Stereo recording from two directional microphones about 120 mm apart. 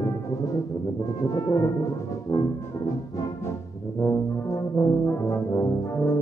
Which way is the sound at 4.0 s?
20° left (ahead or behind).